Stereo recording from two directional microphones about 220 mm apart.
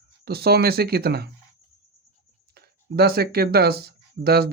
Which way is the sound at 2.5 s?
45° right (ahead or behind).